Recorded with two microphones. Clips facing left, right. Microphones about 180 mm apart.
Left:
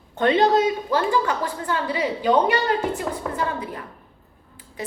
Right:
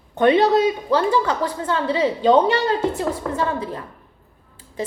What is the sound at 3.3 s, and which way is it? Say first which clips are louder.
Speech: right 3 dB; 30° right (ahead or behind).